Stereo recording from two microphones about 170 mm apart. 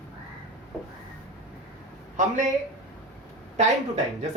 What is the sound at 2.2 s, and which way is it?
Speech, 45° right (ahead or behind).